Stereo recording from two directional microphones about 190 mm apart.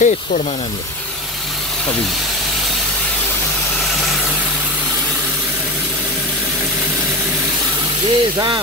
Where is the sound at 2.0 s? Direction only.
Centre (ahead or behind).